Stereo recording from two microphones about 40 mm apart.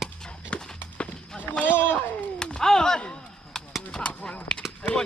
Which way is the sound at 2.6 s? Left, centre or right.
Centre.